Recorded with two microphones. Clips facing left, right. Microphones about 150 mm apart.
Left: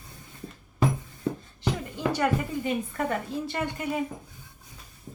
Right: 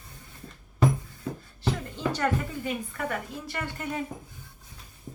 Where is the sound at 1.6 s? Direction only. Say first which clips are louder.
Even; 15° left (ahead or behind).